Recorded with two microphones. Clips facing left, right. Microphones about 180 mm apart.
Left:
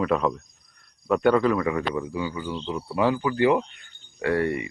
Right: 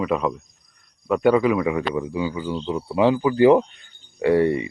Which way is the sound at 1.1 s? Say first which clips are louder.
Right 2 dB; 5° right (ahead or behind).